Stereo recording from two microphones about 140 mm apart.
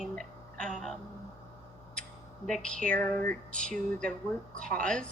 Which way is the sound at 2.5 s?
5° left (ahead or behind).